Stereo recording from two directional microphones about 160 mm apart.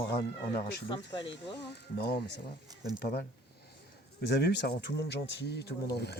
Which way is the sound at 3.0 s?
75° left (ahead or behind).